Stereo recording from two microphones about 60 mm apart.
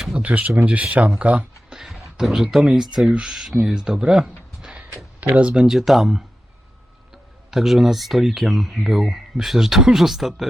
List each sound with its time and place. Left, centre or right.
0.2 s speech: right
1.7 s speech: centre
5.6 s speech: centre
7.5 s speech: centre